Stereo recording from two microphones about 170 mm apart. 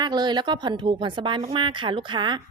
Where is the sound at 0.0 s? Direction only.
25° right (ahead or behind).